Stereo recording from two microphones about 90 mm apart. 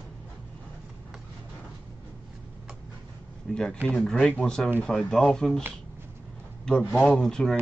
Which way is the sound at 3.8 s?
10° left (ahead or behind).